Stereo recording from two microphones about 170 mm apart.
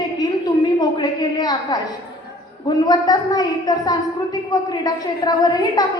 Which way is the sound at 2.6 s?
25° left (ahead or behind).